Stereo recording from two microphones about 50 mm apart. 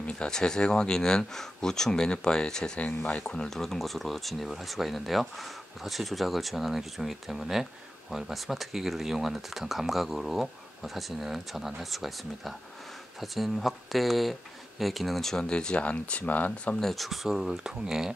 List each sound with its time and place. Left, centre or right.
0.0 s speech: centre; by 16.7 s left
16.8 s speech: centre